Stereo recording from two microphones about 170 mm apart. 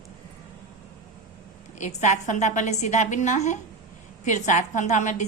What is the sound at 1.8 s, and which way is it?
A woman's voice, 45° left (ahead or behind).